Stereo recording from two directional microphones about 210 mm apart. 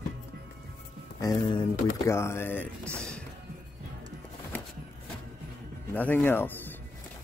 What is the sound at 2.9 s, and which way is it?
Music, 5° left (ahead or behind).